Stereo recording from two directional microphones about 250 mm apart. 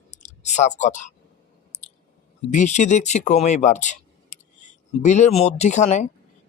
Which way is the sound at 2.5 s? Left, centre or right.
Left.